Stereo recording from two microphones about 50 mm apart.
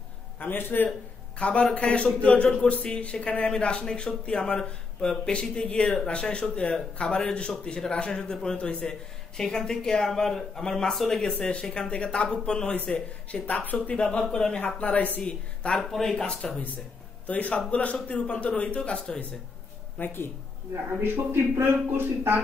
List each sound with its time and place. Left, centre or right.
0.4 s a man's voice: left
1.4 s speech: left
11.9 s speech: left
14.8 s speech: left
15.7 s speech: centre
16.3 s speech: centre
17.3 s a man's voice: left
20.0 s speech: left
21.0 s speech: right